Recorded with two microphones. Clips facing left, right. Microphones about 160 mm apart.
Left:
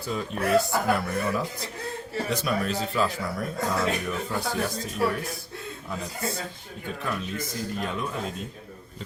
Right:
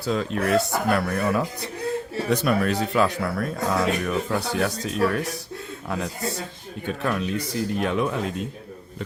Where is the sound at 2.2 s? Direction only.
60° right (ahead or behind).